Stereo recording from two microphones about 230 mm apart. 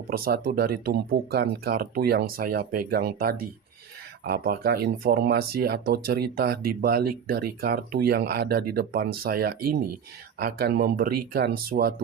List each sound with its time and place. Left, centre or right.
0.1 s speech: right